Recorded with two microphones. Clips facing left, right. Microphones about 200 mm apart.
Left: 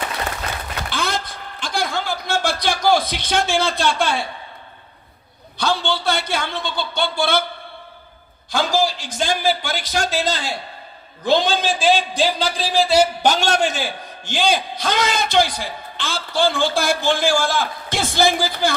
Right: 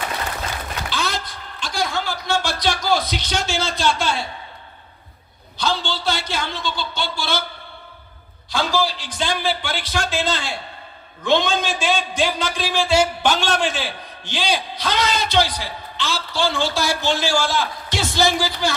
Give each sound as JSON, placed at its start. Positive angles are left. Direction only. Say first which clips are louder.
{"t": 0.9, "sound": "a sound", "louder": "left 2 dB", "side_deg": 55}
{"t": 5.5, "sound": "a man's voice", "louder": "left 3 dB", "side_deg": 55}
{"t": 8.5, "sound": "a man's voice", "louder": "left 2 dB", "side_deg": 50}